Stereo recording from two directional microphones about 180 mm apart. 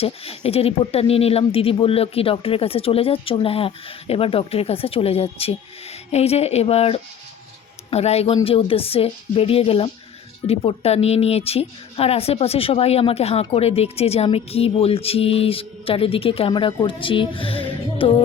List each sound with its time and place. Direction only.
0.0 s speech: 35° left (ahead or behind)